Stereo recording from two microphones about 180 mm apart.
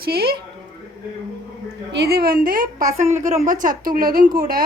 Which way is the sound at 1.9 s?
65° right (ahead or behind).